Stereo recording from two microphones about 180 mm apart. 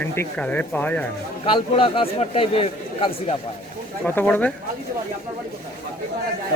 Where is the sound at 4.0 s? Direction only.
10° left (ahead or behind).